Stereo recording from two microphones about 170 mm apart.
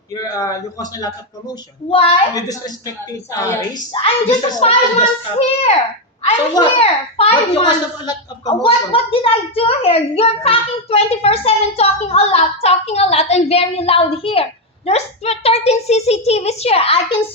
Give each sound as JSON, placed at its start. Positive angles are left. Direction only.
{"t": 0.1, "sound": "a man's voice", "side_deg": 20}
{"t": 1.9, "sound": "a child's voice", "side_deg": 35}
{"t": 2.3, "sound": "a man's voice", "side_deg": 20}
{"t": 3.9, "sound": "a child's voice", "side_deg": 35}
{"t": 6.2, "sound": "a child's voice", "side_deg": 35}